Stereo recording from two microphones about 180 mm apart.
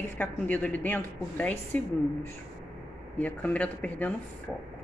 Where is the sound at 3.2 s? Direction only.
10° left (ahead or behind).